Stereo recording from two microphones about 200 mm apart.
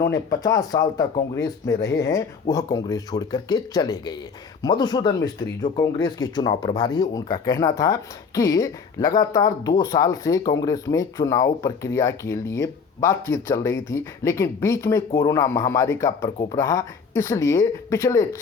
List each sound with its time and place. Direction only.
0.1 s speech: 20° left (ahead or behind)